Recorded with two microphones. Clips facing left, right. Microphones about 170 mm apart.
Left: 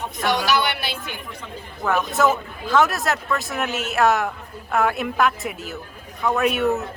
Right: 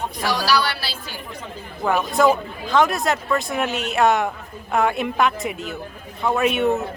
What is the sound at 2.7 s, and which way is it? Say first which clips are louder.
Speech: right 1 dB; 5° left (ahead or behind).